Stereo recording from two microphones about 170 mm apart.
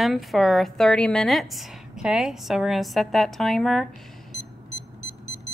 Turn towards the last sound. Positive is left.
turn(degrees=0)  # may be behind; listen again after turning